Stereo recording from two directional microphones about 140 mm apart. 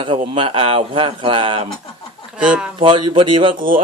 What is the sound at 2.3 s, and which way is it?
Speech, 5° right (ahead or behind).